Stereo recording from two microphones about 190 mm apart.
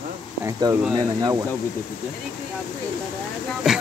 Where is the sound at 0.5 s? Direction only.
20° right (ahead or behind).